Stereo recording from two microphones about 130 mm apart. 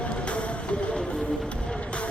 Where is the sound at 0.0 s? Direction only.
10° left (ahead or behind).